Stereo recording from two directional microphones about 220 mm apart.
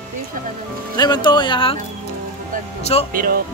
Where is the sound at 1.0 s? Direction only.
20° left (ahead or behind).